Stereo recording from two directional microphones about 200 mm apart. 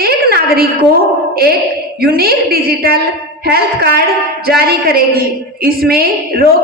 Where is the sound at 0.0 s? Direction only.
50° right (ahead or behind).